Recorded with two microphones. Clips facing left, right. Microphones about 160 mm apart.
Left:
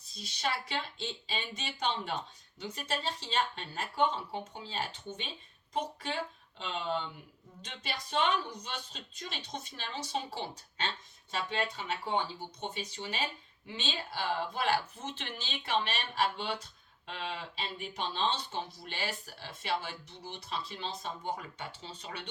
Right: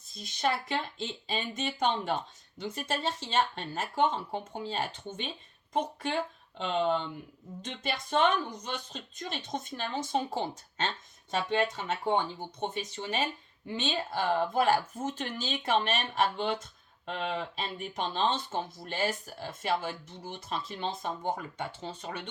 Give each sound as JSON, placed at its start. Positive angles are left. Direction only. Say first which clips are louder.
{"t": 0.0, "sound": "speech", "louder": "right 5 dB", "side_deg": -50}